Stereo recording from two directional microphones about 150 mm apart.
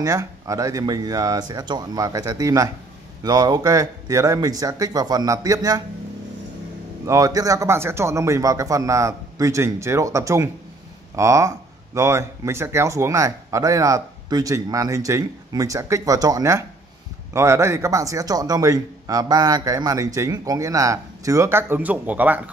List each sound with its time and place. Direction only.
0.0 s speech: 20° right (ahead or behind)
7.1 s speech: 25° right (ahead or behind)